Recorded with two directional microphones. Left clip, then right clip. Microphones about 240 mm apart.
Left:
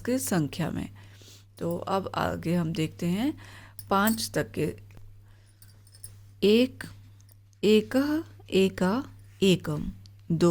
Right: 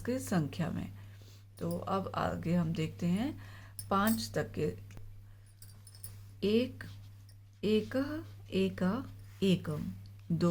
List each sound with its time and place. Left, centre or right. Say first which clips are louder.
0.0 s speech: left 7 dB; left
6.4 s speech: left 9 dB; left